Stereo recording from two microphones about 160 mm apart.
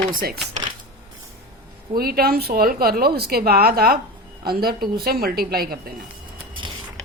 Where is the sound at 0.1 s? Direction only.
60° right (ahead or behind).